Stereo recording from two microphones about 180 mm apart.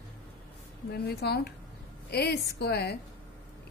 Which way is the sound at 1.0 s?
65° left (ahead or behind).